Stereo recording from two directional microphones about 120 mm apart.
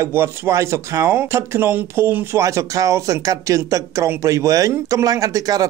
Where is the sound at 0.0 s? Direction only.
25° right (ahead or behind).